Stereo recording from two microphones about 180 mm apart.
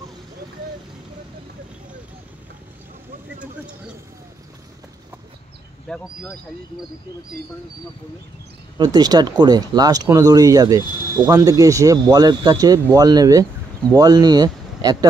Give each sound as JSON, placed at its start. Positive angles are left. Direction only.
{"t": 5.9, "sound": "speech", "side_deg": 5}
{"t": 8.7, "sound": "speech", "side_deg": -20}